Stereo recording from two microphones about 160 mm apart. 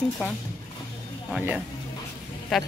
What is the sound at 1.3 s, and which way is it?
Speech, 10° right (ahead or behind).